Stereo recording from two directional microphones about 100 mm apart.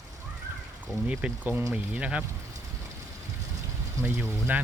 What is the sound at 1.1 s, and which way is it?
Speech, 15° right (ahead or behind).